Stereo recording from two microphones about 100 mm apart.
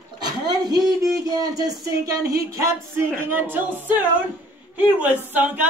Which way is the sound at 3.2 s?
20° right (ahead or behind).